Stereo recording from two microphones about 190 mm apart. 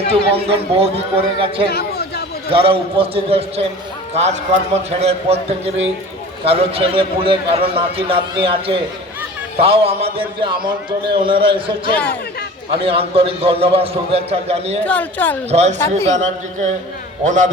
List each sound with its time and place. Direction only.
0.1 s a man's voice: 30° right (ahead or behind)
1.7 s a sound: 55° left (ahead or behind)
2.5 s a man's voice: 30° right (ahead or behind)
14.8 s speech: 10° left (ahead or behind)
15.4 s a man's voice: 35° right (ahead or behind)